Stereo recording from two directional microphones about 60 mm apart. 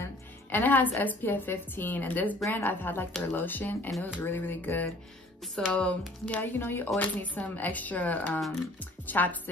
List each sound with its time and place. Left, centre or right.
0.0 s a woman's voice: left
6.4 s speech: left